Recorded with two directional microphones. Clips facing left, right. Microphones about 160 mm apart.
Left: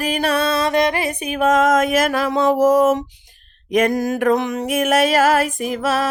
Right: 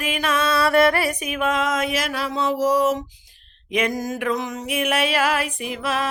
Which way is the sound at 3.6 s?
45° left (ahead or behind).